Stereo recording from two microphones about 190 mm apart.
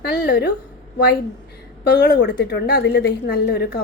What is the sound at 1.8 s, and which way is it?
A woman's voice, 60° left (ahead or behind).